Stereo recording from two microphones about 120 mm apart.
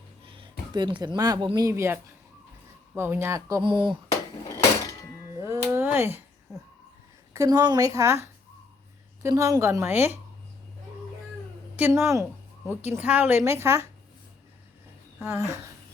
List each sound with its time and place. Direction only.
0.3 s speech: 40° right (ahead or behind); by 3.6 s 25° right (ahead or behind)
3.6 s speech: 45° right (ahead or behind)
5.4 s a sound: 20° right (ahead or behind)
7.3 s speech: 30° right (ahead or behind)
11.8 s speech: 20° right (ahead or behind)
15.2 s speech: 20° right (ahead or behind)